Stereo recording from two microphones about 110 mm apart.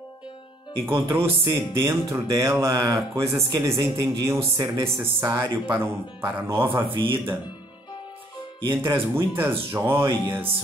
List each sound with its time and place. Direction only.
0.8 s speech: 25° right (ahead or behind)
6.7 s speech: 50° right (ahead or behind)
8.6 s speech: 25° right (ahead or behind)